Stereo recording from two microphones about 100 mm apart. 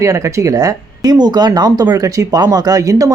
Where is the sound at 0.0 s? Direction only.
30° right (ahead or behind).